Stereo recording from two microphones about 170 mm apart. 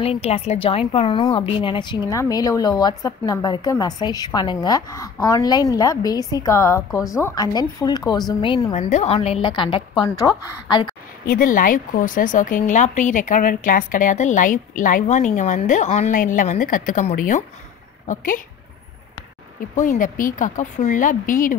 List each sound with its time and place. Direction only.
0.0 s speech: 35° left (ahead or behind)
8.7 s a woman's voice: 40° left (ahead or behind)
10.0 s speech: 20° left (ahead or behind)
11.2 s speech: 55° left (ahead or behind)
19.7 s speech: 50° left (ahead or behind)